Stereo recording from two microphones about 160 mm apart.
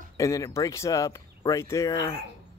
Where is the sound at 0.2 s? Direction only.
20° left (ahead or behind).